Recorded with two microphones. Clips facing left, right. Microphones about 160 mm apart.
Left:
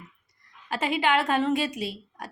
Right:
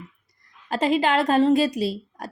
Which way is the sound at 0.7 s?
35° right (ahead or behind).